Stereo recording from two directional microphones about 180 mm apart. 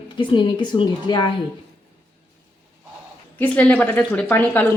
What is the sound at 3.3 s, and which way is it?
A woman's voice, 10° left (ahead or behind).